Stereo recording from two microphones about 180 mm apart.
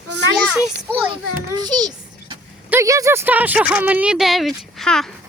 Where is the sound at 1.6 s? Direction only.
20° right (ahead or behind).